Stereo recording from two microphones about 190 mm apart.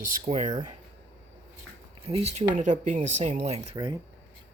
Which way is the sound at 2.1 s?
30° right (ahead or behind).